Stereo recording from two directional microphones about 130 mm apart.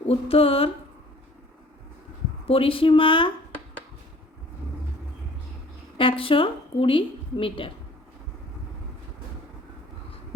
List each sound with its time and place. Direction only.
0.1 s a woman's voice: 50° left (ahead or behind)
2.5 s a woman's voice: 45° left (ahead or behind)
6.0 s a woman's voice: 45° left (ahead or behind)